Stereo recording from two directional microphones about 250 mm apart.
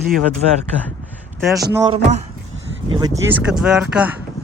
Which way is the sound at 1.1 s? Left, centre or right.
Centre.